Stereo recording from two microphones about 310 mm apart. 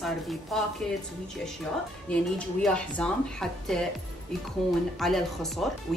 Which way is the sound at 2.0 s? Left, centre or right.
Centre.